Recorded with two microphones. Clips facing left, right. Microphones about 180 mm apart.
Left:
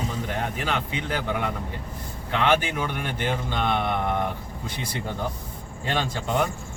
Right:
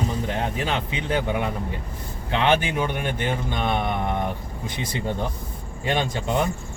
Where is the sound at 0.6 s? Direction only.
20° right (ahead or behind).